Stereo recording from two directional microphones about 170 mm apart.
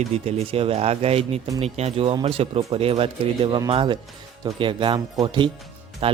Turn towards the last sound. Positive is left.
turn(degrees=-35)  # may be behind; listen again after turning